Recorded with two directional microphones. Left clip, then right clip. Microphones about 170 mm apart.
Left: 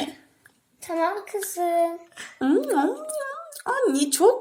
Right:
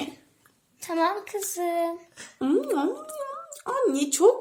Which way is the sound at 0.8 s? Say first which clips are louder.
Even; 40° right (ahead or behind).